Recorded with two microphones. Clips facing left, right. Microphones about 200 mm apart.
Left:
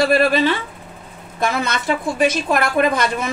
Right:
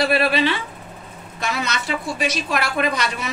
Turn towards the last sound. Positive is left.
turn(degrees=50)  # may be behind; listen again after turning